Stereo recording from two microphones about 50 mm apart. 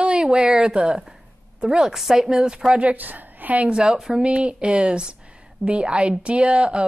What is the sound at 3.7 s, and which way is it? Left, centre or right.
A woman's voice, centre.